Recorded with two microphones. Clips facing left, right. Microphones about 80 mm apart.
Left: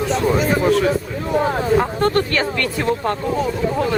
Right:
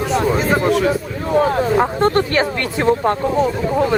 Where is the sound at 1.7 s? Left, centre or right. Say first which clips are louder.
Right 2 dB; centre.